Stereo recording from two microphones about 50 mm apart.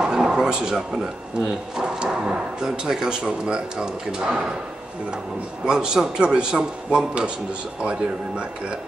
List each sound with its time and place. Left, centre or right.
0.0 s a sound: centre
1.8 s speech: centre
5.7 s speech: centre